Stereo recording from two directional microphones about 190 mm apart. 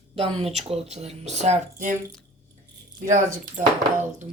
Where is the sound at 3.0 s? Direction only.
40° right (ahead or behind).